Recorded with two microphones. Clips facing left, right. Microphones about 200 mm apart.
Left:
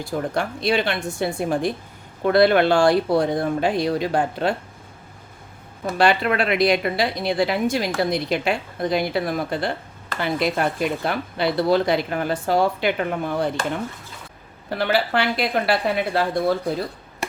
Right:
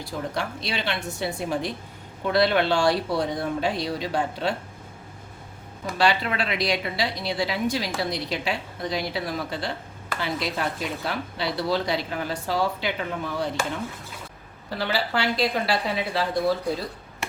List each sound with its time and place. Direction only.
0.0 s a woman's voice: 50° left (ahead or behind)
6.0 s a woman's voice: 55° left (ahead or behind)
14.7 s speech: 55° left (ahead or behind)